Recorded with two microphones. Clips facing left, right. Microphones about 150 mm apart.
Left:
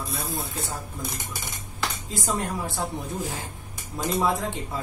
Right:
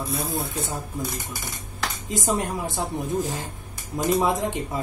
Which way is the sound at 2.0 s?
20° right (ahead or behind).